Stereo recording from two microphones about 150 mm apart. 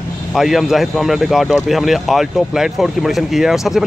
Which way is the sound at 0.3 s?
Centre (ahead or behind).